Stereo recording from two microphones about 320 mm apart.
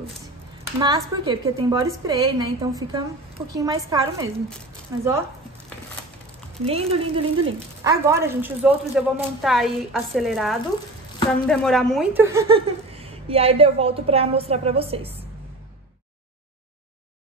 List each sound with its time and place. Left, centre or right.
0.7 s a woman's voice: centre
6.6 s a woman's voice: centre